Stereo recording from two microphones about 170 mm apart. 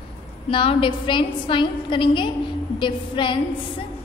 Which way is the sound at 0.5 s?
30° left (ahead or behind).